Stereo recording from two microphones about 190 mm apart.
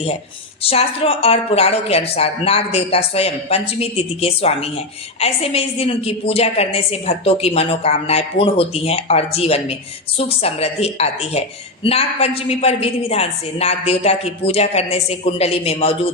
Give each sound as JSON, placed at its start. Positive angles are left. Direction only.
{"t": 0.6, "sound": "speech", "side_deg": 30}